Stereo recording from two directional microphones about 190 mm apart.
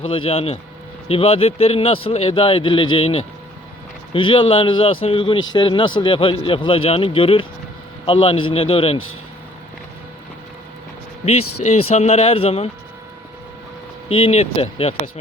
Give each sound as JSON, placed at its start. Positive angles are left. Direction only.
{"t": 0.3, "sound": "speech", "side_deg": 30}
{"t": 11.3, "sound": "speech", "side_deg": 35}
{"t": 14.1, "sound": "speech", "side_deg": 30}